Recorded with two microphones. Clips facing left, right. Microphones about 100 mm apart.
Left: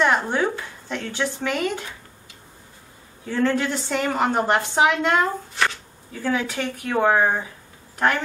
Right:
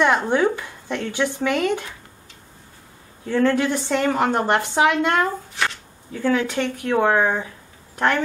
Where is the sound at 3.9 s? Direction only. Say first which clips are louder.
Right 1 dB; 10° left (ahead or behind).